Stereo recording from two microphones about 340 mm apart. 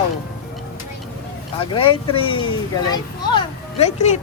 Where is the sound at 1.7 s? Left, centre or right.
Centre.